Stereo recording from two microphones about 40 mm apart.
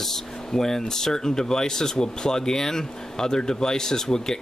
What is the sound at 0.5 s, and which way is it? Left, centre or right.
Speech, centre.